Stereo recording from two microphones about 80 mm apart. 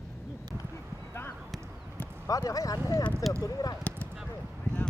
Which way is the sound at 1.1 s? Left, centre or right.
Left.